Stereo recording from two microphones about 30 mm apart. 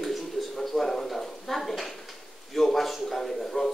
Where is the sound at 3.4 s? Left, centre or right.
Centre.